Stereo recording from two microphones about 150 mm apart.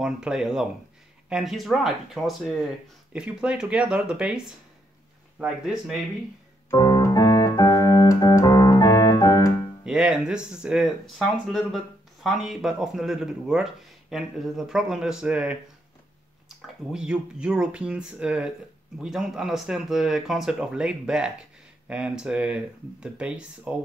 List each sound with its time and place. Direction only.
0.0 s speech: 5° right (ahead or behind)
5.4 s speech: 5° right (ahead or behind)
6.7 s keyboard: 20° left (ahead or behind)
9.8 s speech: 5° right (ahead or behind)